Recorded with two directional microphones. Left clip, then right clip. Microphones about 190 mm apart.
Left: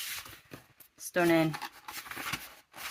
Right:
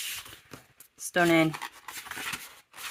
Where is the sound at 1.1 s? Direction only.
25° right (ahead or behind).